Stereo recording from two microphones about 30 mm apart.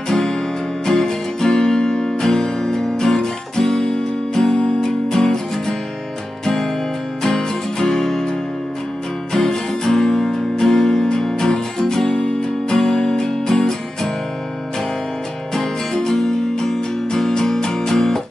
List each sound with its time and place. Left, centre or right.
0.1 s music: centre
2.0 s guitar: centre
3.8 s music: left
7.9 s music: centre
9.3 s music: centre
15.5 s music: centre